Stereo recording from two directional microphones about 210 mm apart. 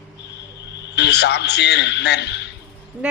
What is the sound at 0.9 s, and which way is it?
A man's voice, 55° left (ahead or behind).